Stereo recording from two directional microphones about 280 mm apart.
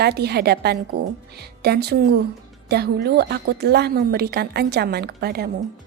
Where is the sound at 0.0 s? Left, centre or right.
Right.